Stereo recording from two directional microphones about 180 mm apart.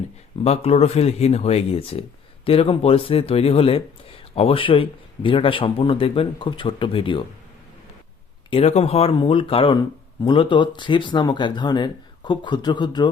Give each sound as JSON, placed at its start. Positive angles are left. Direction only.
{"t": 0.4, "sound": "speech", "side_deg": 35}
{"t": 8.4, "sound": "speech", "side_deg": 35}